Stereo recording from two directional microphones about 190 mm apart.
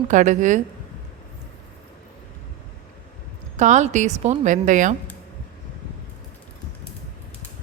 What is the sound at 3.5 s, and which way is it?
Speech, 40° right (ahead or behind).